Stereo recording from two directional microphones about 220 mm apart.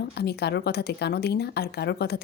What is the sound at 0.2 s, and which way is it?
A woman's voice, 45° left (ahead or behind).